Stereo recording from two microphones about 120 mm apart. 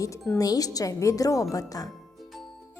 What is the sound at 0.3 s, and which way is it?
Speech, 30° left (ahead or behind).